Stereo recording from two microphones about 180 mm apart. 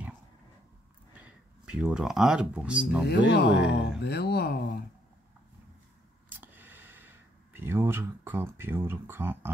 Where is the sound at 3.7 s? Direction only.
65° left (ahead or behind).